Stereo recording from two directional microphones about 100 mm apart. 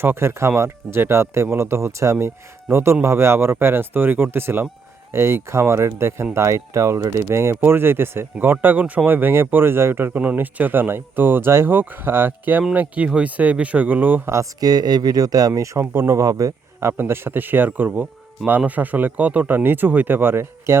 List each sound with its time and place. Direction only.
0.0 s speech: 25° right (ahead or behind)
14.3 s speech: 40° right (ahead or behind)
17.0 s speech: 25° right (ahead or behind)